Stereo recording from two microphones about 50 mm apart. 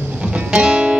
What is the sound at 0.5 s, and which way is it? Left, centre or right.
Music, centre.